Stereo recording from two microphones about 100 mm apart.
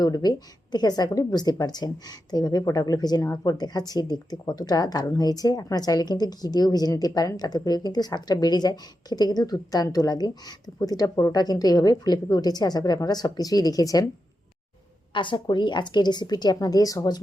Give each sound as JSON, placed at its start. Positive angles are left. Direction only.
{"t": 0.0, "sound": "speech", "side_deg": 40}
{"t": 15.1, "sound": "a woman's voice", "side_deg": 55}